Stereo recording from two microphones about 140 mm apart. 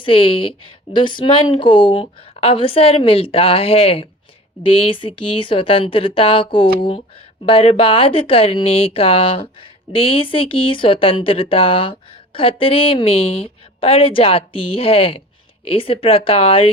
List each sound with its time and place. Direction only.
0.0 s speech: 40° left (ahead or behind)